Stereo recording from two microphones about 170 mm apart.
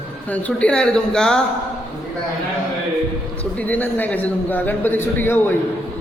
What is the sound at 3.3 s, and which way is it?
A man's voice, 10° left (ahead or behind).